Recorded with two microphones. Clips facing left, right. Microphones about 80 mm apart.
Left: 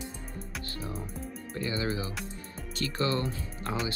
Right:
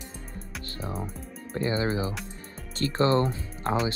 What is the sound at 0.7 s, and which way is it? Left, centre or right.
Speech, right.